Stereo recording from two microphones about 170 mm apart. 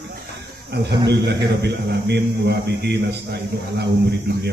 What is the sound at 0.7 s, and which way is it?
A man's voice, 75° right (ahead or behind).